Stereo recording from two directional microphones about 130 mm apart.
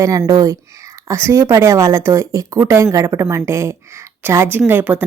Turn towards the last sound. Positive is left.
turn(degrees=-15)  # may be behind; listen again after turning